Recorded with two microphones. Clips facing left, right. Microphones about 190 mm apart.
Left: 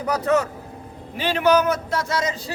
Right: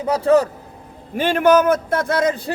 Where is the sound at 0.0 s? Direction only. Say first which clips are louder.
Right 5 dB; 30° right (ahead or behind).